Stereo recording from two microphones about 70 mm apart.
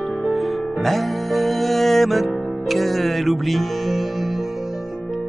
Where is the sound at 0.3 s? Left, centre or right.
Centre.